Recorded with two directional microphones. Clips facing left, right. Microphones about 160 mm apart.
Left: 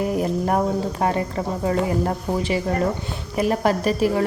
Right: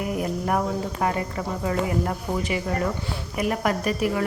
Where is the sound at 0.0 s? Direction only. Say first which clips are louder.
Left 5 dB; 30° left (ahead or behind).